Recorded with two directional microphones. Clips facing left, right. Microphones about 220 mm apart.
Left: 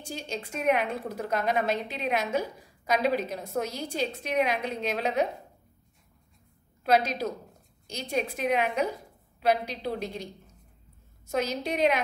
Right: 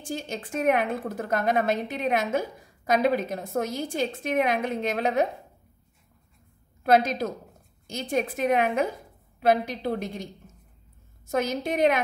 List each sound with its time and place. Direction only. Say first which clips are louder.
0.1 s a woman's voice: right 4 dB; 50° right (ahead or behind)
6.8 s a woman's voice: right 3 dB; 50° right (ahead or behind)